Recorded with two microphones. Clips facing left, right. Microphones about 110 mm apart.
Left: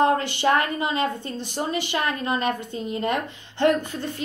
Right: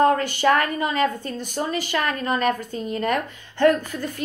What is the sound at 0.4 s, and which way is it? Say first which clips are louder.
A woman's voice: right 2 dB; 25° left (ahead or behind).